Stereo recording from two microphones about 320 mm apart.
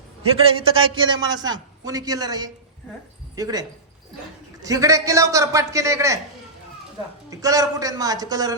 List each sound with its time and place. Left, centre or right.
0.7 s a man's voice: centre
7.3 s a man's voice: centre